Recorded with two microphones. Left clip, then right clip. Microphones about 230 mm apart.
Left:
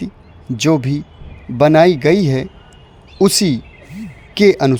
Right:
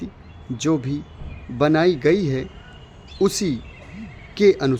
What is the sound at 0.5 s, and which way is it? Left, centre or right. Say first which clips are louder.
Speech: left 7 dB; left.